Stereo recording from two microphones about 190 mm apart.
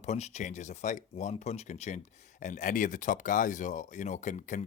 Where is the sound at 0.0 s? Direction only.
35° left (ahead or behind).